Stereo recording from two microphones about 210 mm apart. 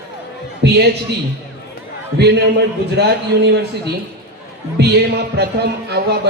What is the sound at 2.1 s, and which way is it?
Music, 55° right (ahead or behind).